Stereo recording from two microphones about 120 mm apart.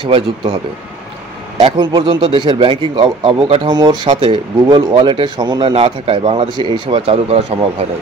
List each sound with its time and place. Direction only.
1.8 s speech: 35° right (ahead or behind); by 3.7 s 55° right (ahead or behind)
3.7 s speech: 40° right (ahead or behind)
6.9 s speech: 60° right (ahead or behind)